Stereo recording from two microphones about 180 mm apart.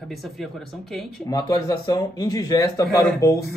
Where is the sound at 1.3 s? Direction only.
20° left (ahead or behind).